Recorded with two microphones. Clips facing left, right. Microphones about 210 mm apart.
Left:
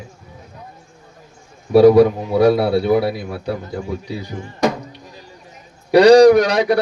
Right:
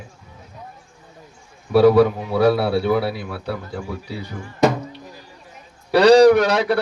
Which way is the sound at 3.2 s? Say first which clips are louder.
Left 3 dB; 40° left (ahead or behind).